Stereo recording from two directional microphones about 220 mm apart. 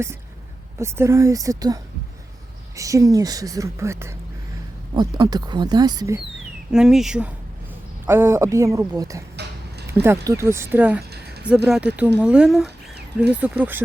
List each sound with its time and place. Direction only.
0.8 s a woman's voice: 10° right (ahead or behind)
6.7 s a woman's voice: 5° right (ahead or behind)
9.3 s a sound: 50° right (ahead or behind)
10.2 s a woman's voice: 10° right (ahead or behind)